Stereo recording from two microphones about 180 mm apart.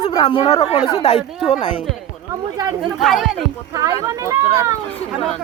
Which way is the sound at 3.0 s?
Centre (ahead or behind).